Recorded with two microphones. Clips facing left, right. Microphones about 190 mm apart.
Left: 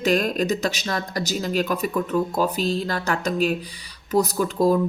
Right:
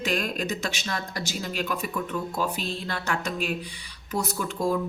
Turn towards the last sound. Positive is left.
turn(degrees=40)  # may be behind; listen again after turning